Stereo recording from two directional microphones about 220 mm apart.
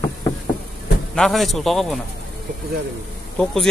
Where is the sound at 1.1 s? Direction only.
Centre (ahead or behind).